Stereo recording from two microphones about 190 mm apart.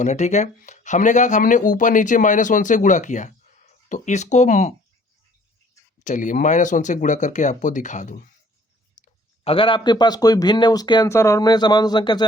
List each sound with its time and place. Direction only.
0.0 s speech: 40° left (ahead or behind)
6.1 s speech: 40° left (ahead or behind); by 12.2 s 25° left (ahead or behind)